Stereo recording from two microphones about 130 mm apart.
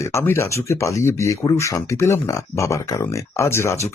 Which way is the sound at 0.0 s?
20° left (ahead or behind).